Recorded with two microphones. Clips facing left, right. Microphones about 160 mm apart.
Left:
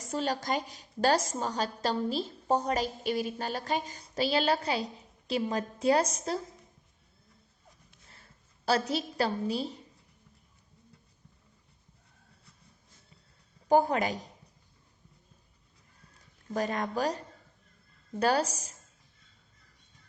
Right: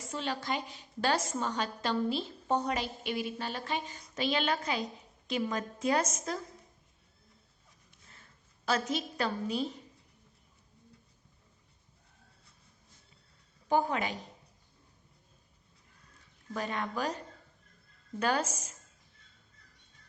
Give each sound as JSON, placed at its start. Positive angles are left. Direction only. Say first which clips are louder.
{"t": 0.0, "sound": "a woman's voice", "louder": "left 4 dB", "side_deg": 40}
{"t": 8.1, "sound": "a woman's voice", "louder": "even", "side_deg": 35}
{"t": 13.7, "sound": "a woman's voice", "louder": "left 5 dB", "side_deg": 40}
{"t": 16.6, "sound": "a woman's voice", "louder": "left 4 dB", "side_deg": 40}